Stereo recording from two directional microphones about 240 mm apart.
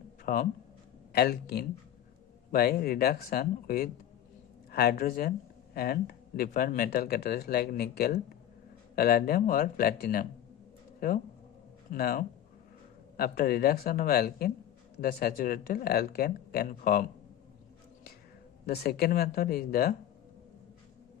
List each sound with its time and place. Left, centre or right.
0.3 s speech: left
11.9 s speech: left
18.6 s speech: left